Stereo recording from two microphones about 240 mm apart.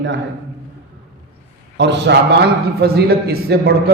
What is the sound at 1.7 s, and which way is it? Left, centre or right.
A man's voice, right.